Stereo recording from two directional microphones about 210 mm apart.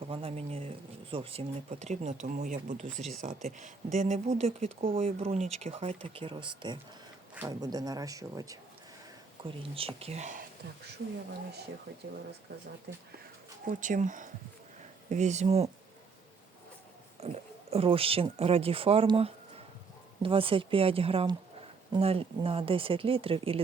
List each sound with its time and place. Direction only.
0.1 s speech: 25° right (ahead or behind)
12.9 s speech: 50° right (ahead or behind)
13.7 s speech: 40° right (ahead or behind)
17.2 s speech: 30° right (ahead or behind)